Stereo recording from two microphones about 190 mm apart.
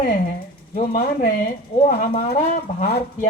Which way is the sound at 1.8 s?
35° left (ahead or behind).